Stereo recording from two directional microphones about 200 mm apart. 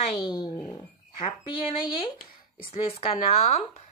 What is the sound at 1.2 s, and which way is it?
A woman's voice, 25° left (ahead or behind).